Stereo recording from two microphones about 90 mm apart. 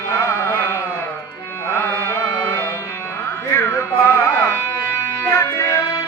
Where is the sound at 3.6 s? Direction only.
25° left (ahead or behind).